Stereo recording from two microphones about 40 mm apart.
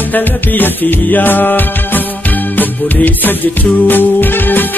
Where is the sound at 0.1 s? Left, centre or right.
Left.